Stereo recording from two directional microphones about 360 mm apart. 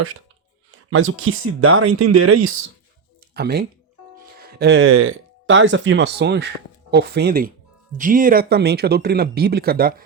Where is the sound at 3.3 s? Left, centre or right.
Right.